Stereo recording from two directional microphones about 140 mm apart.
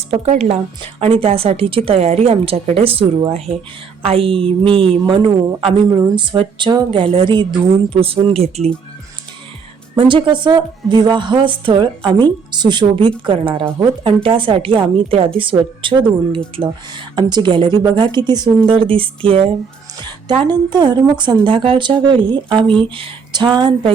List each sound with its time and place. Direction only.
0.1 s a woman's voice: 50° right (ahead or behind)
5.9 s speech: 25° right (ahead or behind)
6.1 s a woman's voice: 40° right (ahead or behind)
9.9 s a woman's voice: 35° right (ahead or behind)
17.2 s a woman's voice: 30° right (ahead or behind)